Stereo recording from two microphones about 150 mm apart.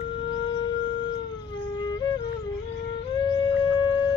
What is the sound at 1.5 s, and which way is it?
Music, 30° left (ahead or behind).